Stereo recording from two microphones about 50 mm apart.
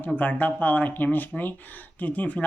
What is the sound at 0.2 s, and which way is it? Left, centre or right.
Speech, left.